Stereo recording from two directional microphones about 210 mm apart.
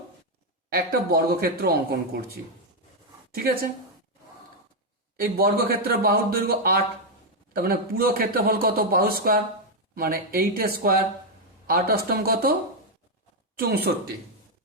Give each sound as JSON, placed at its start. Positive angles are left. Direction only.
{"t": 0.7, "sound": "a man's voice", "side_deg": -50}
{"t": 5.1, "sound": "a man's voice", "side_deg": -45}
{"t": 13.6, "sound": "a man's voice", "side_deg": -50}